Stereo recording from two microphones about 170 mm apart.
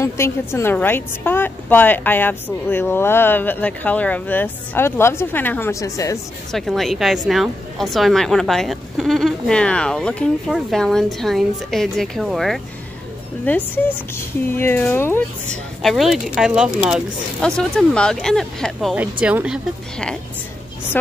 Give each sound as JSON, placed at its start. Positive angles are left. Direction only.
{"t": 0.0, "sound": "a woman's voice", "side_deg": 15}
{"t": 6.5, "sound": "a woman's voice", "side_deg": 0}
{"t": 13.5, "sound": "a woman's voice", "side_deg": 15}